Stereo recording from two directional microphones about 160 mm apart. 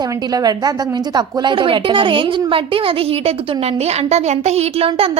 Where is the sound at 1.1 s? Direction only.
30° right (ahead or behind).